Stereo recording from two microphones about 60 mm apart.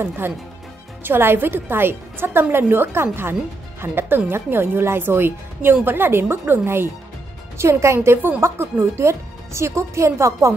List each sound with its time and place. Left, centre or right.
0.2 s a woman's voice: right
7.5 s a woman's voice: right